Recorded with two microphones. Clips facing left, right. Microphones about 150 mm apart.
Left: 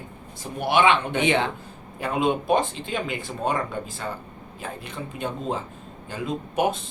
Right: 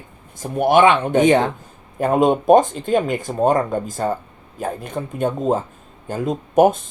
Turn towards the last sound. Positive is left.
turn(degrees=-45)  # may be behind; listen again after turning